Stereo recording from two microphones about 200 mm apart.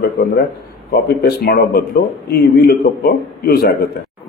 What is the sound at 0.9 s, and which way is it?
Speech, 50° left (ahead or behind).